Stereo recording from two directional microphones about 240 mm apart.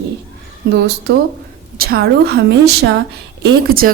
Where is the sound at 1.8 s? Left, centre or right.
Right.